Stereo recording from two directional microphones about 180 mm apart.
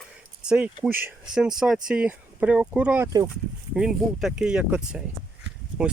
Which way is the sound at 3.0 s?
20° right (ahead or behind).